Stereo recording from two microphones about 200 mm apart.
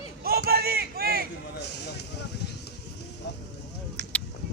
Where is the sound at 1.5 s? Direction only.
55° left (ahead or behind).